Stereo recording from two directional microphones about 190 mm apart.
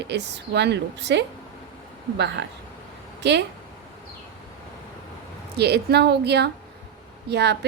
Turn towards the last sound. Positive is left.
turn(degrees=-60)  # may be behind; listen again after turning